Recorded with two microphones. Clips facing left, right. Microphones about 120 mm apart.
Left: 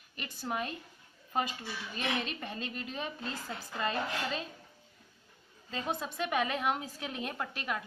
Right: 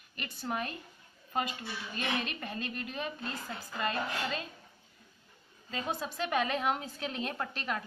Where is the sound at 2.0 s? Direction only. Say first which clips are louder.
Even; 20° left (ahead or behind).